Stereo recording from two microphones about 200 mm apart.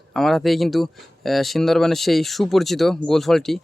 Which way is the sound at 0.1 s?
Centre (ahead or behind).